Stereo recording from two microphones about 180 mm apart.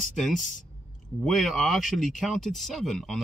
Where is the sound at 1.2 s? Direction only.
Centre (ahead or behind).